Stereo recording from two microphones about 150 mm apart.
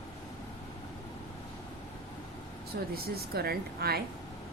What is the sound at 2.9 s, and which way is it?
A woman's voice, 90° right.